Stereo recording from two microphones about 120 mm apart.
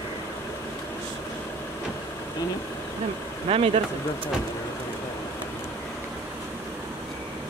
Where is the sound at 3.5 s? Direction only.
55° right (ahead or behind).